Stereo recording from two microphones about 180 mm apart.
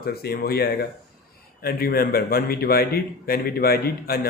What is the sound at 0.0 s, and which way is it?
A man's voice, 60° left (ahead or behind).